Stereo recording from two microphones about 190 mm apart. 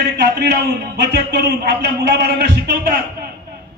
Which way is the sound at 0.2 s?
60° right (ahead or behind).